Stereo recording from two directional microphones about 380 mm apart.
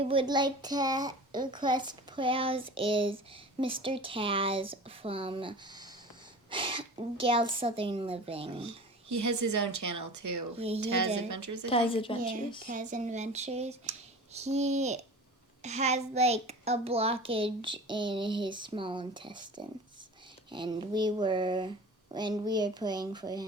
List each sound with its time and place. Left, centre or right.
0.0 s a child's voice: centre
9.0 s a woman's voice: right
11.7 s speech: centre
12.6 s a child's voice: centre